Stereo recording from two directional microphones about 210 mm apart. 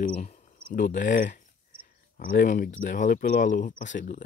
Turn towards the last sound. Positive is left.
turn(degrees=35)  # may be behind; listen again after turning